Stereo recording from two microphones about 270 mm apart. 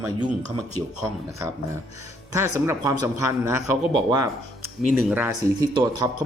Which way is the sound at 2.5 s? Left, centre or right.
Centre.